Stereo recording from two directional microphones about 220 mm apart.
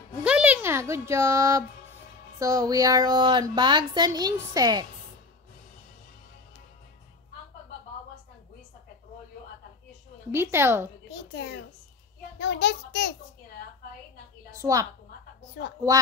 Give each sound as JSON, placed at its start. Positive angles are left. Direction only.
{"t": 0.2, "sound": "a sound", "side_deg": -5}
{"t": 2.3, "sound": "speech", "side_deg": -15}
{"t": 10.3, "sound": "speech", "side_deg": -10}
{"t": 11.1, "sound": "a child's voice", "side_deg": 50}
{"t": 14.6, "sound": "a woman's voice", "side_deg": -15}